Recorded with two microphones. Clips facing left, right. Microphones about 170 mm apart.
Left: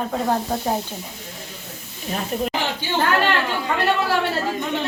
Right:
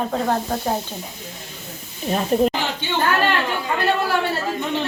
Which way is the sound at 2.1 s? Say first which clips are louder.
Right 7 dB; 35° right (ahead or behind).